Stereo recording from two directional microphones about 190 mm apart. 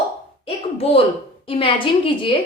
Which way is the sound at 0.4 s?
30° left (ahead or behind).